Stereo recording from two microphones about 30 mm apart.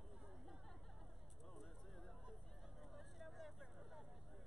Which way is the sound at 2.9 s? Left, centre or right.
Centre.